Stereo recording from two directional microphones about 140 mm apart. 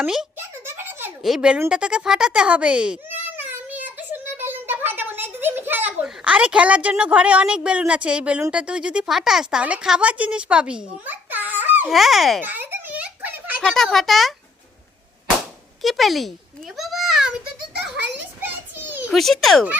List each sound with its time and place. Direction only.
0.0 s a child's voice: 5° right (ahead or behind)
0.3 s a sound: 15° right (ahead or behind)
1.2 s a child's voice: 5° right (ahead or behind)
11.9 s a child's voice: centre (ahead or behind)
12.4 s giggle: 15° right (ahead or behind)
13.6 s a child's voice: 5° left (ahead or behind)
15.8 s a child's voice: centre (ahead or behind)
16.7 s a sound: centre (ahead or behind)
19.1 s a child's voice: centre (ahead or behind)